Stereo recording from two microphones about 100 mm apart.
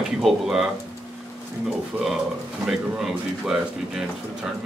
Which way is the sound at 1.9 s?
15° right (ahead or behind).